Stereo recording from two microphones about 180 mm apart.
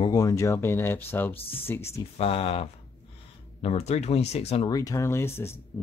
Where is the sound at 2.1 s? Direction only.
30° left (ahead or behind).